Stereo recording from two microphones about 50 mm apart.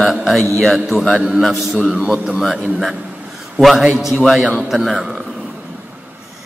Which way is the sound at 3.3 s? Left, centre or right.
Centre.